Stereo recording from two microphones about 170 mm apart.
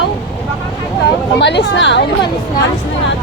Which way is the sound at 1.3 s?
90° left.